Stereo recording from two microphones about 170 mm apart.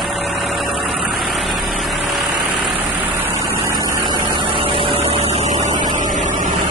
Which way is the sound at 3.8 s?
25° right (ahead or behind).